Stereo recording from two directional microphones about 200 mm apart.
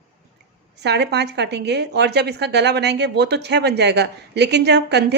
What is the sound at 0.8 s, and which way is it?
A woman's voice, 55° right (ahead or behind).